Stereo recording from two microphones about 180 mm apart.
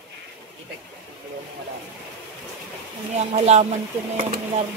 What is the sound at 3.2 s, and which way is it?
Speech, 35° right (ahead or behind).